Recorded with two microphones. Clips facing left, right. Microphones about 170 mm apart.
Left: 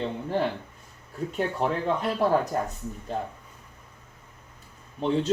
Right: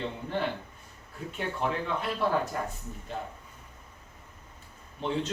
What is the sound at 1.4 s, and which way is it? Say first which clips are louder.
Speech: left 4 dB; 40° left (ahead or behind).